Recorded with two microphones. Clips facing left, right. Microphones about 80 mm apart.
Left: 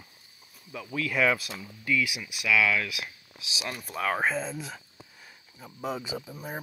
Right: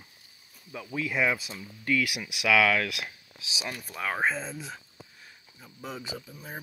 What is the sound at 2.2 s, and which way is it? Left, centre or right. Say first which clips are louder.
Speech: right 3 dB; right.